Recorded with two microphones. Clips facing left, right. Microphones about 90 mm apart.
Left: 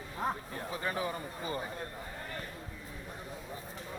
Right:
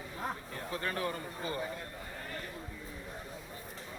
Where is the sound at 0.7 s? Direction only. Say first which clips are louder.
Even; 10° left (ahead or behind).